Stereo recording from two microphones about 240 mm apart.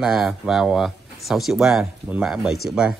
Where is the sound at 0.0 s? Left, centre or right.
Centre.